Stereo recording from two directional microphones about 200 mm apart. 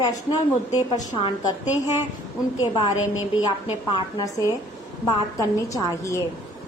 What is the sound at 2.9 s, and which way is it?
Speech, 90° left.